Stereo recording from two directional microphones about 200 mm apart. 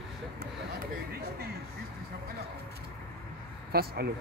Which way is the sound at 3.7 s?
50° right (ahead or behind).